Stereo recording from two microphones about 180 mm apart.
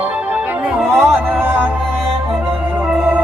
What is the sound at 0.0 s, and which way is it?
Music, 10° right (ahead or behind).